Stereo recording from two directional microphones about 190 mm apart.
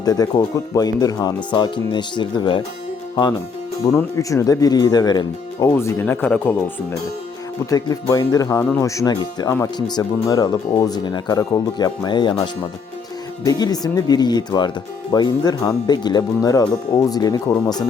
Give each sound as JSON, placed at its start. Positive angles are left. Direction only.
{"t": 0.0, "sound": "speech", "side_deg": 20}
{"t": 3.8, "sound": "speech", "side_deg": 15}
{"t": 7.7, "sound": "speech", "side_deg": 20}